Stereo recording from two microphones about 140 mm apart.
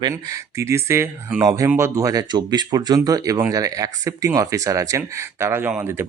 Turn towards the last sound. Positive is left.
turn(degrees=-15)  # may be behind; listen again after turning